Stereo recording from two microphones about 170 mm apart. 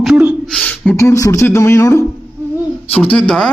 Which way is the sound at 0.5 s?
10° left (ahead or behind).